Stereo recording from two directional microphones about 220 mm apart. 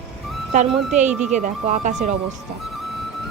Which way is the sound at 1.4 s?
35° right (ahead or behind).